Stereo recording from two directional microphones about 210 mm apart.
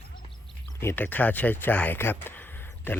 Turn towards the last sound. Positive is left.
turn(degrees=10)  # may be behind; listen again after turning